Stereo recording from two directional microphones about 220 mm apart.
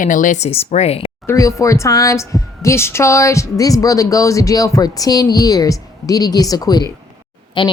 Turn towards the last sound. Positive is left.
turn(degrees=20)  # may be behind; listen again after turning